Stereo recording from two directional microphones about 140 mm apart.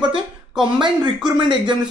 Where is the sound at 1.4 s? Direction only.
35° right (ahead or behind).